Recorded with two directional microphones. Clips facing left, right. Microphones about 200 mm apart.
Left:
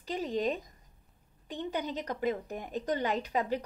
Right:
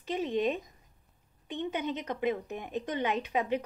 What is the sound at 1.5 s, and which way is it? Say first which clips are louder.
Speech: right 2 dB; 40° left (ahead or behind).